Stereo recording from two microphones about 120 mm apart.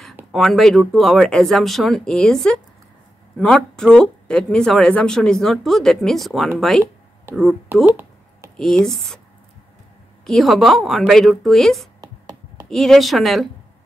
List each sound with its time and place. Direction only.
0.3 s speech: centre (ahead or behind)
7.7 s speech: 15° right (ahead or behind)
8.5 s speech: 5° left (ahead or behind)
10.2 s speech: centre (ahead or behind)
12.0 s a sound: 35° right (ahead or behind)
12.6 s speech: 5° left (ahead or behind)